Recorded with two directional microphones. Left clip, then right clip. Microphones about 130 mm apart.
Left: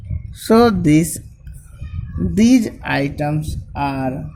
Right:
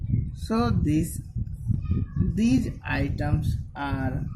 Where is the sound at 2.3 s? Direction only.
45° left (ahead or behind).